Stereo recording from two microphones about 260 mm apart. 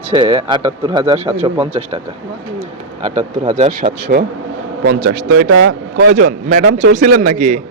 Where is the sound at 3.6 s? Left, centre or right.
Right.